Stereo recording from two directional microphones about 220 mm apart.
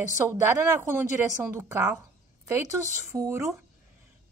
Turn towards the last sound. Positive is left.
turn(degrees=-15)  # may be behind; listen again after turning